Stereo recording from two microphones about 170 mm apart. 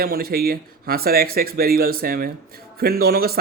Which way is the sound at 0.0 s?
65° right (ahead or behind).